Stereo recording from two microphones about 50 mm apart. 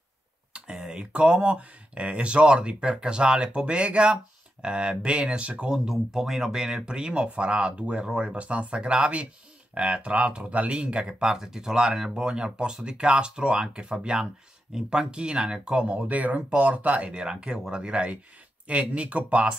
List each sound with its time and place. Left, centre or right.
0.5 s speech: centre
5.9 s speech: centre; by 19.5 s right